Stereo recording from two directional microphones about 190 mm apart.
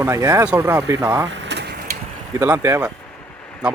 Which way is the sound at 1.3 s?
65° right (ahead or behind).